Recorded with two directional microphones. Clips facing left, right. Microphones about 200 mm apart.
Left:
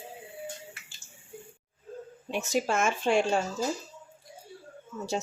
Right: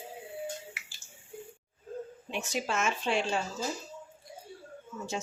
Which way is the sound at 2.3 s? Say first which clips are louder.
Left 6 dB; 40° left (ahead or behind).